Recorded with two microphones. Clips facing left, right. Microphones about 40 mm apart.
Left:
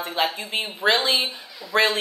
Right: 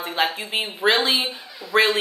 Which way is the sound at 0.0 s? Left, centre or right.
Centre.